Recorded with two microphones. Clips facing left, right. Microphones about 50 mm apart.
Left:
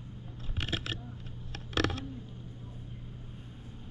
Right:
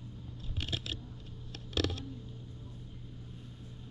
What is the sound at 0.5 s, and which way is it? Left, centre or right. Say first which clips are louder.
Scissors: left 4 dB; left.